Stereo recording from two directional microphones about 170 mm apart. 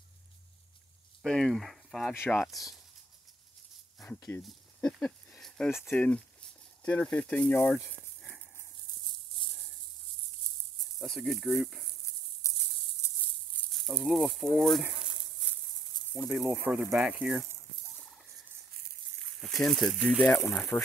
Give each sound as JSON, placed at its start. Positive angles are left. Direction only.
{"t": 1.2, "sound": "speech", "side_deg": 0}
{"t": 2.1, "sound": "speech", "side_deg": 10}
{"t": 2.4, "sound": "speech", "side_deg": 0}
{"t": 4.4, "sound": "a sound", "side_deg": 0}
{"t": 5.8, "sound": "speech", "side_deg": 5}
{"t": 11.0, "sound": "speech", "side_deg": 0}
{"t": 12.4, "sound": "a sound", "side_deg": 20}
{"t": 13.7, "sound": "speech", "side_deg": 0}
{"t": 16.2, "sound": "speech", "side_deg": -5}
{"t": 19.4, "sound": "speech", "side_deg": 0}